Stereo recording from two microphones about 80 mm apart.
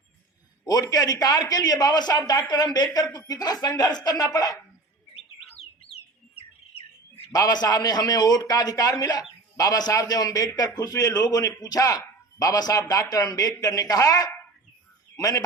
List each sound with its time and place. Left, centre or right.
0.6 s speech: left
7.3 s a man's voice: left